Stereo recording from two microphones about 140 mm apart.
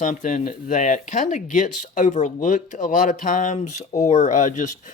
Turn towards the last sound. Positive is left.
turn(degrees=60)  # may be behind; listen again after turning